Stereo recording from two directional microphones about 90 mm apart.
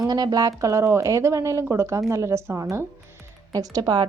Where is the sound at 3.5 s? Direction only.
45° right (ahead or behind).